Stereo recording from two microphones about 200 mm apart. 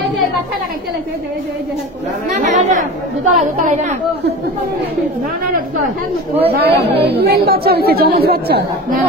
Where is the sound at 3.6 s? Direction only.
40° right (ahead or behind).